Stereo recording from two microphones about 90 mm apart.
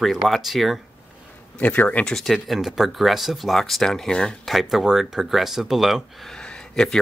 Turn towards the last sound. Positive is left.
turn(degrees=5)  # may be behind; listen again after turning